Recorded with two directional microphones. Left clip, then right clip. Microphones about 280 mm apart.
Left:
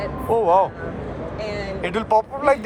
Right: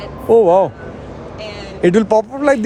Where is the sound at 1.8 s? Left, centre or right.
Right.